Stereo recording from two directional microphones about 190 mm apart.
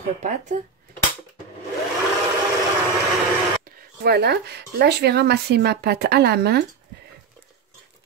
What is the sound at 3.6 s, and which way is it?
Speech, 50° right (ahead or behind).